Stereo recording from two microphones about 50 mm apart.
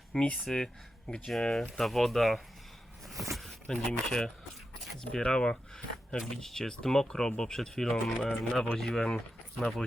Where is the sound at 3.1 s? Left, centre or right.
Centre.